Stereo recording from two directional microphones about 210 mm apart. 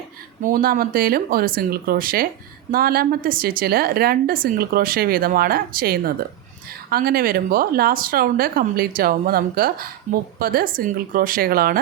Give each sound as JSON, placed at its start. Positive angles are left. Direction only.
{"t": 0.4, "sound": "a woman's voice", "side_deg": -40}